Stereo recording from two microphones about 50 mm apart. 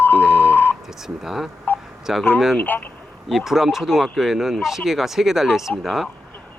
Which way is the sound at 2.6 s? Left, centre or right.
Left.